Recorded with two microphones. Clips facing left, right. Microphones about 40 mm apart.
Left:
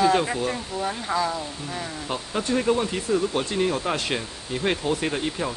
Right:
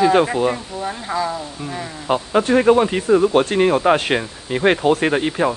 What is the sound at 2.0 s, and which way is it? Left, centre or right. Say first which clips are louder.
Speech: right 12 dB; right.